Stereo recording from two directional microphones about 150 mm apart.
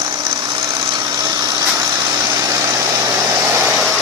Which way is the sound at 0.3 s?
25° right (ahead or behind).